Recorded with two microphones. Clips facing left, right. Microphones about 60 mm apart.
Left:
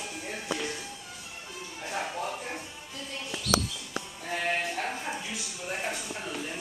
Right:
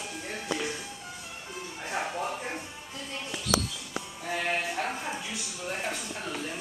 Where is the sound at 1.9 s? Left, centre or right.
Centre.